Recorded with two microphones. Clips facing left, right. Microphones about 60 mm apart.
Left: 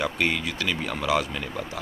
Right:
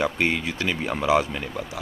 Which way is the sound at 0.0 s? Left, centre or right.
Right.